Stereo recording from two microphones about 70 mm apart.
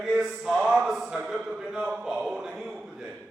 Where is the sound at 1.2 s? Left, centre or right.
Centre.